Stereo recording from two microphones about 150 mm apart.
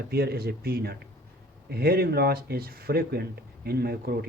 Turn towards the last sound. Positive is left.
turn(degrees=-90)